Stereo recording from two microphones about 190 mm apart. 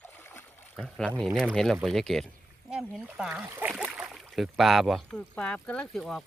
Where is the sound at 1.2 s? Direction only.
Centre (ahead or behind).